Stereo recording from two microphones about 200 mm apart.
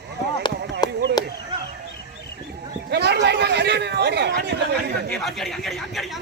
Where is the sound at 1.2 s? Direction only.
20° left (ahead or behind).